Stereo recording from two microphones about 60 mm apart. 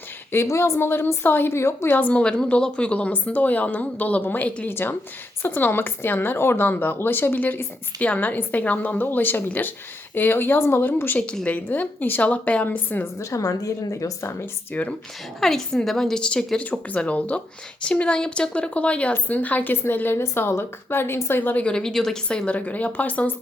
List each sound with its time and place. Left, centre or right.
0.4 s a woman's voice: left
2.0 s a woman's voice: left
2.2 s a woman's voice: centre
4.7 s a woman's voice: left
11.4 s a woman's voice: left
13.1 s a woman's voice: left
14.8 s speech: left
15.4 s a woman's voice: centre; by 19.7 s left
19.7 s speech: left
21.5 s a woman's voice: centre